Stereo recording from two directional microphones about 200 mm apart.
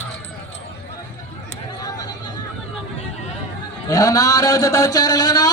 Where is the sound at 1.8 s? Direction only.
20° left (ahead or behind).